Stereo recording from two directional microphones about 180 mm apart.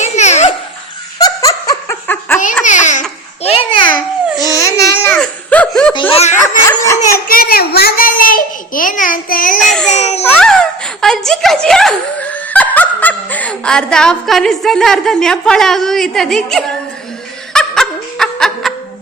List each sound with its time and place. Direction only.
0.0 s laughter: 40° left (ahead or behind)
1.2 s giggle: 20° left (ahead or behind)
2.6 s babbling: 45° left (ahead or behind)
4.4 s baby cry: 20° left (ahead or behind)
5.0 s laughter: 10° left (ahead or behind)
5.9 s laughter: 30° left (ahead or behind)
6.7 s dog: 15° left (ahead or behind)
7.3 s a sound: 55° left (ahead or behind)
9.6 s baby cry: centre (ahead or behind)
9.8 s a child's voice: 40° left (ahead or behind)
10.3 s speech: 5° left (ahead or behind)
17.5 s snicker: 5° left (ahead or behind)